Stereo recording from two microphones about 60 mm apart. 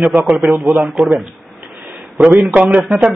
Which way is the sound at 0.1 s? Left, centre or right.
Right.